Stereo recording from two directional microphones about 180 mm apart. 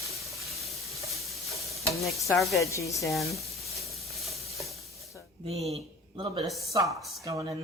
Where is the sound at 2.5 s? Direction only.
15° left (ahead or behind).